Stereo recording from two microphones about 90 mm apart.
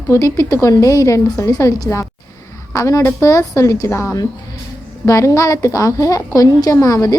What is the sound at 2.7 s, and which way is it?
A woman's voice, 35° left (ahead or behind).